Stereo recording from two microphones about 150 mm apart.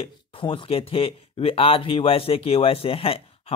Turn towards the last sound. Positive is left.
turn(degrees=40)  # may be behind; listen again after turning